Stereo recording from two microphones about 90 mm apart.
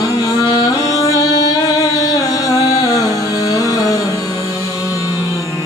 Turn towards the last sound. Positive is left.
turn(degrees=40)  # may be behind; listen again after turning